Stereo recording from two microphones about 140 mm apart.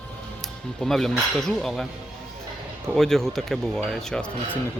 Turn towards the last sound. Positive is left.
turn(degrees=5)  # may be behind; listen again after turning